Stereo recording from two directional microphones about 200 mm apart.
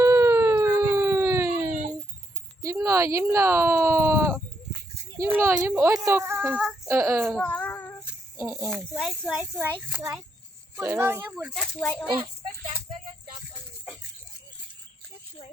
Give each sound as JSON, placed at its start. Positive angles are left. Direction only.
{"t": 0.0, "sound": "a sound", "side_deg": -15}
{"t": 2.6, "sound": "a child's voice", "side_deg": -15}
{"t": 7.3, "sound": "child singing", "side_deg": 5}
{"t": 8.5, "sound": "speech", "side_deg": 0}
{"t": 12.1, "sound": "speech", "side_deg": -25}